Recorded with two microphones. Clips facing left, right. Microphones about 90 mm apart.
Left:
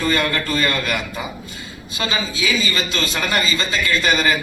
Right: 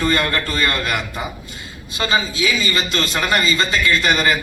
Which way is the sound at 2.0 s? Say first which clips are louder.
Right 3 dB; 45° right (ahead or behind).